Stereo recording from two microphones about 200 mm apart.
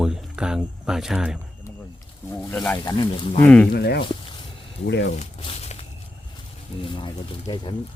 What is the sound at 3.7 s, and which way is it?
Speech, 55° left (ahead or behind).